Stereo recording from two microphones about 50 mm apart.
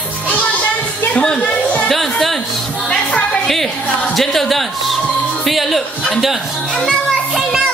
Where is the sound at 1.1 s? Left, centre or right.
Centre.